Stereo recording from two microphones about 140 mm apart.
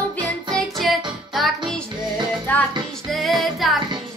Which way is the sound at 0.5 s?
Centre (ahead or behind).